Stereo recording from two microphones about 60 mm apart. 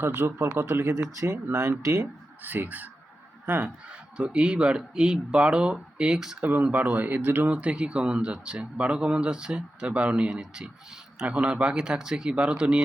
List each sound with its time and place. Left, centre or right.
0.0 s speech: right
2.4 s speech: right
4.2 s speech: centre
6.4 s speech: right